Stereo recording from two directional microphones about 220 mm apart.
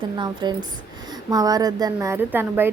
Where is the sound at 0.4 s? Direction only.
20° right (ahead or behind).